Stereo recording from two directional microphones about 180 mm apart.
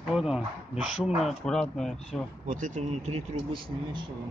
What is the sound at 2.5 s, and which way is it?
Speech, 45° right (ahead or behind).